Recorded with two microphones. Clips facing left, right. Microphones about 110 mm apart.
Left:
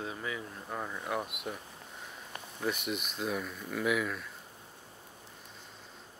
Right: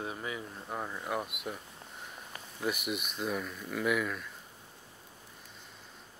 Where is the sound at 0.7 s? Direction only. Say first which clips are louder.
Even; 5° right (ahead or behind).